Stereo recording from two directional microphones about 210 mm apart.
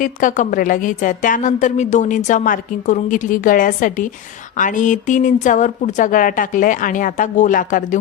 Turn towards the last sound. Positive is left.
turn(degrees=40)  # may be behind; listen again after turning